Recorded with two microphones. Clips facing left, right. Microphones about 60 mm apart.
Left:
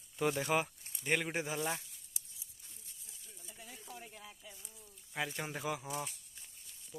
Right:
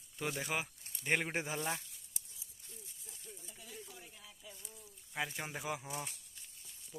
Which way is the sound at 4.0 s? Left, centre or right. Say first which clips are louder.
Left 5 dB; left.